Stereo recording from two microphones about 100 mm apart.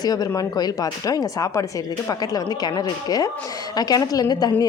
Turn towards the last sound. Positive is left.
turn(degrees=40)  # may be behind; listen again after turning